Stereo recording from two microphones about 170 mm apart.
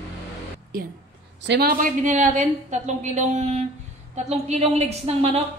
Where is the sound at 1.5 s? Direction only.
65° right (ahead or behind); by 5.4 s 40° right (ahead or behind).